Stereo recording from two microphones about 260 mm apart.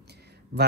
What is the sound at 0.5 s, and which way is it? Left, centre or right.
Speech, right.